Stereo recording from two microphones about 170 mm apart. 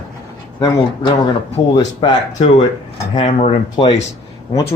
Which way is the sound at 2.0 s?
30° left (ahead or behind).